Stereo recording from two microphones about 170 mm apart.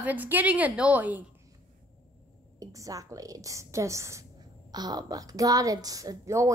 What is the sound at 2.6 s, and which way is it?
A woman's voice, 20° right (ahead or behind).